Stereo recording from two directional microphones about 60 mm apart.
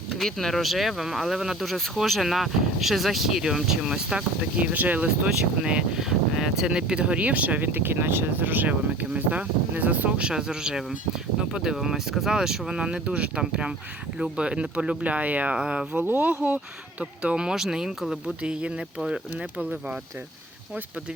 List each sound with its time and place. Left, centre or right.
0.2 s speech: centre; by 10.2 s right
10.2 s speech: centre
16.0 s speech: right